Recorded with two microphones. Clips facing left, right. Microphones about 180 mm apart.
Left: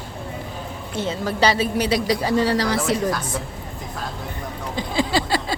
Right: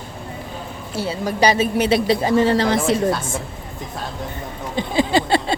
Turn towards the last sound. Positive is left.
turn(degrees=-25)  # may be behind; listen again after turning